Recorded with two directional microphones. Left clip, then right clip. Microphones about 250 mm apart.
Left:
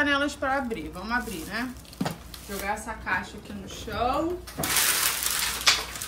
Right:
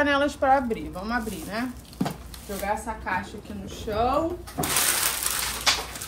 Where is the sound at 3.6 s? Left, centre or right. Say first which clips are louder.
Right 3 dB; centre.